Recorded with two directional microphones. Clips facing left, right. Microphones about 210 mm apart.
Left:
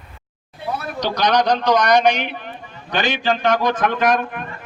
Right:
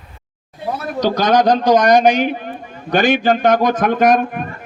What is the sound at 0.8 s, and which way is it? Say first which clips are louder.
A man's voice: right 5 dB; 40° right (ahead or behind).